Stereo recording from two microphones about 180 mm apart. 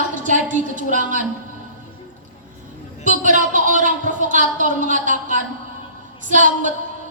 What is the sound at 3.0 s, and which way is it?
A woman's voice, 45° right (ahead or behind).